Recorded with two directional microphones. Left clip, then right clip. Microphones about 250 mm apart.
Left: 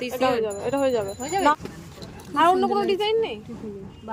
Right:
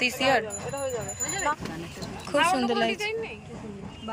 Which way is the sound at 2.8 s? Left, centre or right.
Left.